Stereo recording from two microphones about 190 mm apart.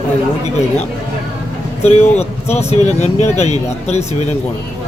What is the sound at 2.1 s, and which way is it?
Speech, 35° left (ahead or behind).